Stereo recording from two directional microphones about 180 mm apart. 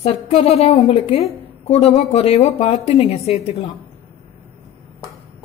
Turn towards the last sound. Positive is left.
turn(degrees=35)  # may be behind; listen again after turning